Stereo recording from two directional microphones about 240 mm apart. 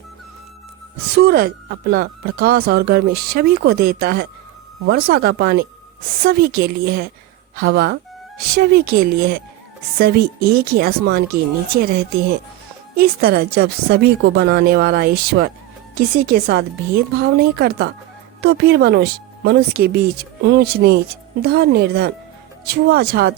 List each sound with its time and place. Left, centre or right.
1.1 s speech: right